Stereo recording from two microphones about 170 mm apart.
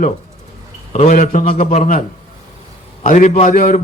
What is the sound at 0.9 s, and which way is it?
A man's voice, 45° left (ahead or behind).